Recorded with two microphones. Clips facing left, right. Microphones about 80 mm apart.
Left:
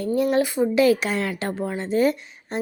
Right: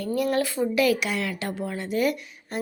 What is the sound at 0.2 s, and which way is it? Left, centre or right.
Speech, left.